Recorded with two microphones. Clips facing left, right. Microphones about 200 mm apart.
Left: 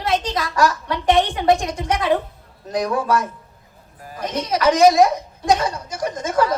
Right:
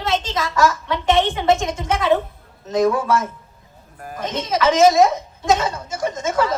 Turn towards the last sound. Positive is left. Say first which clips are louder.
# even
turn(degrees=-25)  # may be behind; listen again after turning